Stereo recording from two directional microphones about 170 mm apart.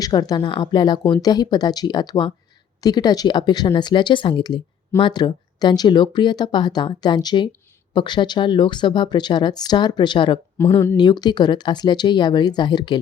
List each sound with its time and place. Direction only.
0.0 s speech: 25° left (ahead or behind)
10.6 s speech: 15° left (ahead or behind)
10.9 s speech: 25° left (ahead or behind)